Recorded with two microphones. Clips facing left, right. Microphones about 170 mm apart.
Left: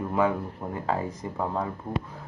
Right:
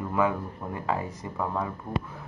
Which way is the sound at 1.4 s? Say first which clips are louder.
Left 1 dB; 35° left (ahead or behind).